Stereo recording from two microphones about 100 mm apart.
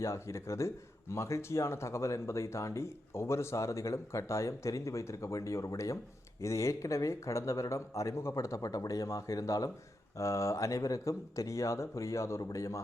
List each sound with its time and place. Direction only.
0.0 s speech: 30° left (ahead or behind)